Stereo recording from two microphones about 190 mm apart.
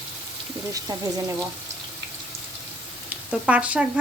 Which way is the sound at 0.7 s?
15° right (ahead or behind).